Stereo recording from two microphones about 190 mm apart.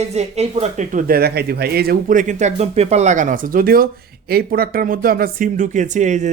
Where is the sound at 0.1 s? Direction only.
35° right (ahead or behind).